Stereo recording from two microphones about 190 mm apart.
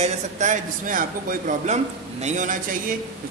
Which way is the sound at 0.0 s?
40° right (ahead or behind).